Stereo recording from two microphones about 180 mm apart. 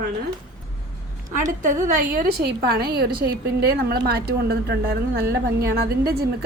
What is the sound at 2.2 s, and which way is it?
A woman's voice, 60° right (ahead or behind).